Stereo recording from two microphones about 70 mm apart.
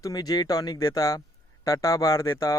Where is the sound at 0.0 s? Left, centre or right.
Left.